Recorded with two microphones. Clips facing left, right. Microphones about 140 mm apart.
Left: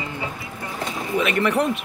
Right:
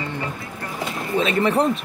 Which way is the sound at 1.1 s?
30° right (ahead or behind).